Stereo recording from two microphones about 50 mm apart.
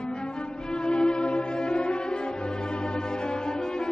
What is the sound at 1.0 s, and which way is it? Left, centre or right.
Music, centre.